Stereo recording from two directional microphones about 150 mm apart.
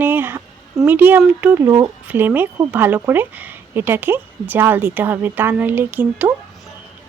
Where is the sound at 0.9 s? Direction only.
15° right (ahead or behind).